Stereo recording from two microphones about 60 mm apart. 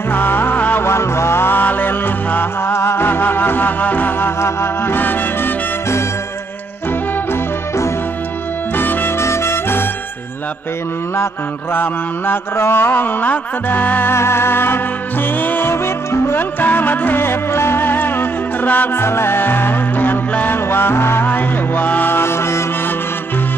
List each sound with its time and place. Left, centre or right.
0.1 s music: left
0.8 s music: left
4.4 s music: left
8.7 s music: left
9.2 s music: left
11.7 s mantra: left
14.1 s music: left
15.7 s music: left
19.0 s mantra: left
21.3 s music: left